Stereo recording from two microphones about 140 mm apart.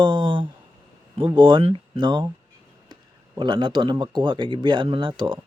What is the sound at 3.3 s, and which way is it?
Speech, 35° right (ahead or behind).